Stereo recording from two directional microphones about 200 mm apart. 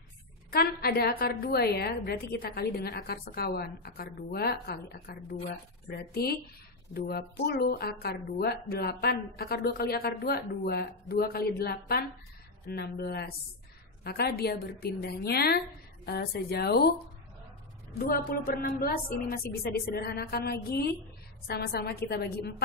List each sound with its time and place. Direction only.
0.5 s speech: 50° left (ahead or behind)
17.9 s speech: 45° left (ahead or behind)